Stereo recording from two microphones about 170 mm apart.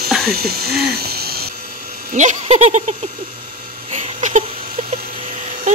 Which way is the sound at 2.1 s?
45° right (ahead or behind).